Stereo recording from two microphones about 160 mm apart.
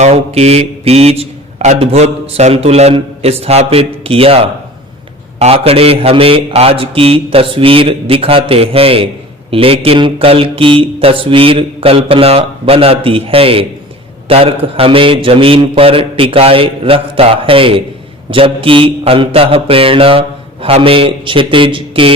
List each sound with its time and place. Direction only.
0.0 s speech: 40° right (ahead or behind)